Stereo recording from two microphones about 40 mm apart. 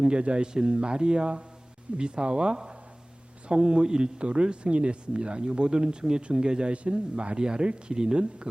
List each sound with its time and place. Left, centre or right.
0.0 s speech: right